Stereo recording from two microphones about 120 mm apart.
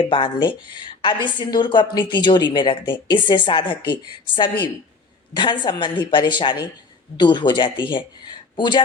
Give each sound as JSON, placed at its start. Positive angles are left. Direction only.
{"t": 0.0, "sound": "speech", "side_deg": 45}